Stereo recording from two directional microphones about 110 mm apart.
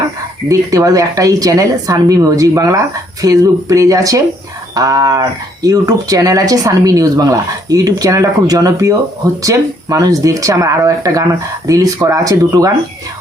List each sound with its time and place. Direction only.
0.4 s speech: 35° right (ahead or behind)